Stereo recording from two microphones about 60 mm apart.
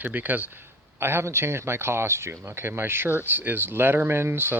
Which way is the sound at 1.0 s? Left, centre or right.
Right.